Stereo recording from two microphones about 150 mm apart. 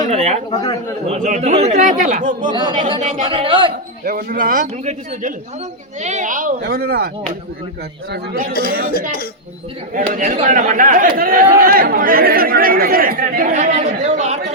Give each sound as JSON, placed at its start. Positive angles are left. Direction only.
{"t": 0.1, "sound": "speech", "side_deg": -45}
{"t": 0.5, "sound": "a man's voice", "side_deg": 25}
{"t": 1.4, "sound": "speech", "side_deg": -45}
{"t": 1.8, "sound": "speech", "side_deg": -60}
{"t": 2.5, "sound": "speech", "side_deg": -30}
{"t": 4.0, "sound": "speech", "side_deg": -70}
{"t": 8.1, "sound": "a man's voice", "side_deg": -80}
{"t": 9.9, "sound": "speech", "side_deg": -65}